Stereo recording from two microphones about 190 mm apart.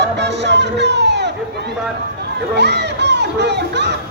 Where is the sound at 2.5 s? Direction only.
60° right (ahead or behind).